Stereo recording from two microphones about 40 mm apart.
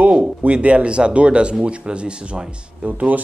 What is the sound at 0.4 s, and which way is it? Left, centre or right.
Speech, right.